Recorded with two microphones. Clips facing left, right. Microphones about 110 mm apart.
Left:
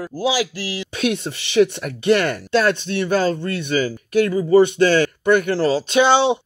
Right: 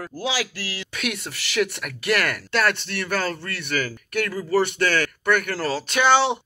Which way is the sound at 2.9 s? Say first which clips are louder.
Left 7 dB; 55° right (ahead or behind).